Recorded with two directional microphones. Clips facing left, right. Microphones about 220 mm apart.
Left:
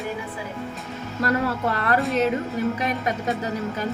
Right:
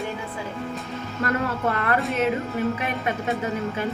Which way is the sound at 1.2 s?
35° left (ahead or behind).